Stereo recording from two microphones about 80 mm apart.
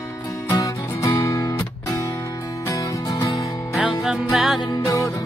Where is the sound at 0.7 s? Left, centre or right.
Left.